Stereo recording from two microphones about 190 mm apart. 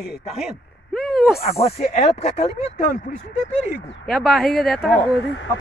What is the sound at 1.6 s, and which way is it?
Speech, 35° left (ahead or behind).